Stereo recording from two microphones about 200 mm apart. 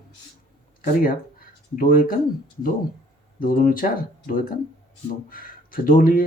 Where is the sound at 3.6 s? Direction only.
45° left (ahead or behind).